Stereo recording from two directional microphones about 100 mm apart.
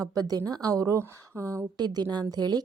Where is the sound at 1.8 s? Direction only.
45° right (ahead or behind).